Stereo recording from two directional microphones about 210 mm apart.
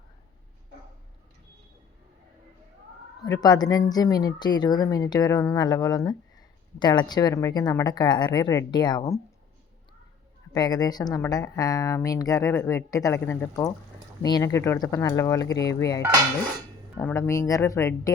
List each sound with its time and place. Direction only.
3.2 s speech: 20° left (ahead or behind)
10.5 s speech: 20° left (ahead or behind)
17.0 s speech: 10° left (ahead or behind)